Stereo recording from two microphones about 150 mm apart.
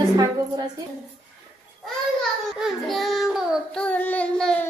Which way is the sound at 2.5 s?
Centre (ahead or behind).